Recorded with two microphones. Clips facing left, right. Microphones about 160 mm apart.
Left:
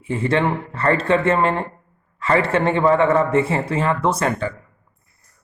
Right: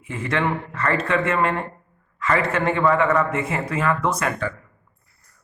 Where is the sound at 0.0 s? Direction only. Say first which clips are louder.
Left 5 dB; 30° left (ahead or behind).